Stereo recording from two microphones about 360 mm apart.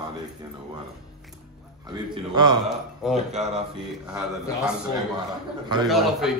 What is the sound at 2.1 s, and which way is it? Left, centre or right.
A man's voice, centre.